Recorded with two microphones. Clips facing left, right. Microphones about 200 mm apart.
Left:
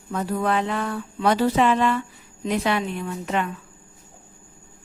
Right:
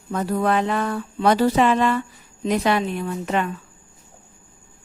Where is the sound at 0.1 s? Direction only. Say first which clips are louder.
Right 3 dB; 45° right (ahead or behind).